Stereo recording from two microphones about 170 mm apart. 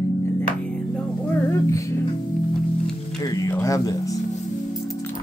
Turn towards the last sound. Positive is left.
turn(degrees=20)  # may be behind; listen again after turning